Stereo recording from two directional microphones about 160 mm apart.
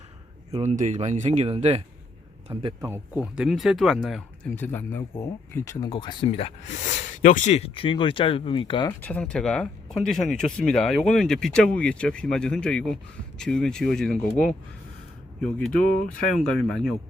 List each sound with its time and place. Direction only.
0.5 s a man's voice: 40° right (ahead or behind); by 2.6 s 25° right (ahead or behind)
2.8 s speech: 10° right (ahead or behind)
4.5 s speech: 10° left (ahead or behind)
5.9 s speech: 30° left (ahead or behind)
9.0 s speech: 10° left (ahead or behind)
15.8 s speech: 60° left (ahead or behind)
16.0 s speech: centre (ahead or behind)